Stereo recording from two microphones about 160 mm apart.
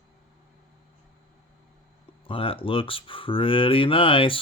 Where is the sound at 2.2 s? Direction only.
35° left (ahead or behind).